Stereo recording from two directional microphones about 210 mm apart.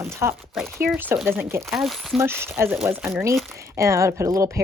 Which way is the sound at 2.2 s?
10° right (ahead or behind).